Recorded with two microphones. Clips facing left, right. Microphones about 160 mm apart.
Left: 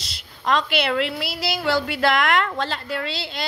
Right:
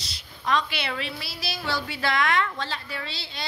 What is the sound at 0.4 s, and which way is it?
A woman's voice, 75° left (ahead or behind).